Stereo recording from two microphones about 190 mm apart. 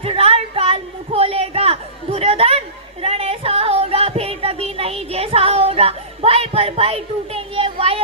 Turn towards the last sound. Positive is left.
turn(degrees=-30)  # may be behind; listen again after turning